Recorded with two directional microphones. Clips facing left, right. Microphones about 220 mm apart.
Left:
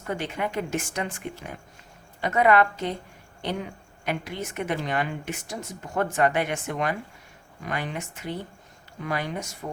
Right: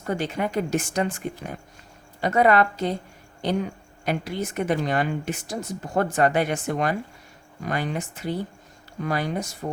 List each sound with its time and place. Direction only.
0.0 s a woman's voice: 40° right (ahead or behind)